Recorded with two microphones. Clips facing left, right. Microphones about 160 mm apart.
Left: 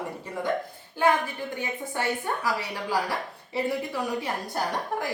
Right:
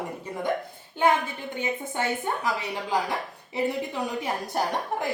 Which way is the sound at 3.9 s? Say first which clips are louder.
Even; 20° right (ahead or behind).